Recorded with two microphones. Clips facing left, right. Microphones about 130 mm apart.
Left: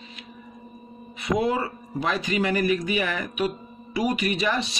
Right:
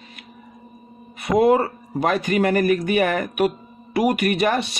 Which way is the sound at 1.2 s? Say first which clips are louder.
Right 7 dB; 55° right (ahead or behind).